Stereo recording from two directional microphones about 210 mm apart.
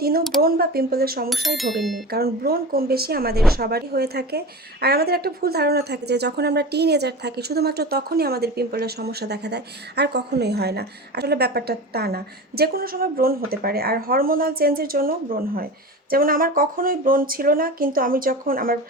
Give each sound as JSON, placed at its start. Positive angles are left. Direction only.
{"t": 0.0, "sound": "a woman's voice", "side_deg": -45}
{"t": 1.3, "sound": "speech", "side_deg": 0}
{"t": 2.1, "sound": "a woman's voice", "side_deg": -45}